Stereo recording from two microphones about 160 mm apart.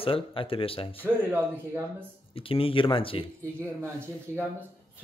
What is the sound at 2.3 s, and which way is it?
Speech, 35° left (ahead or behind).